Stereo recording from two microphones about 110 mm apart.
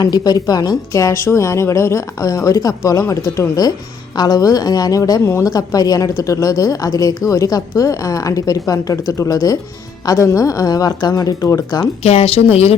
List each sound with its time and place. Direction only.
0.0 s a woman's voice: 40° left (ahead or behind)
12.0 s speech: 70° left (ahead or behind)